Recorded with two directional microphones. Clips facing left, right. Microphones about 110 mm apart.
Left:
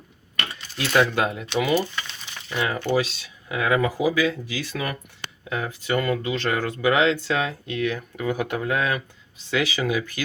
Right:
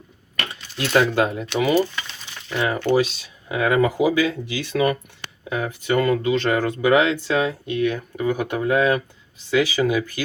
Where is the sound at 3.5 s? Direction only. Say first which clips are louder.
Right 3 dB; 25° right (ahead or behind).